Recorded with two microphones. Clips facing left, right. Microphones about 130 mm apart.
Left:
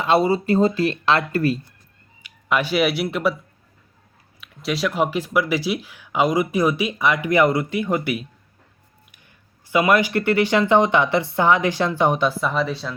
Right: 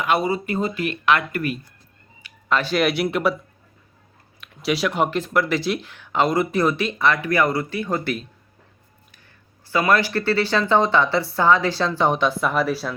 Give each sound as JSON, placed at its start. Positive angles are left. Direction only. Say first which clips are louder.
{"t": 0.0, "sound": "speech", "louder": "left 3 dB", "side_deg": 30}
{"t": 2.5, "sound": "speech", "louder": "left 1 dB", "side_deg": 10}
{"t": 4.4, "sound": "speech", "louder": "right 2 dB", "side_deg": 0}
{"t": 9.6, "sound": "speech", "louder": "left 2 dB", "side_deg": 15}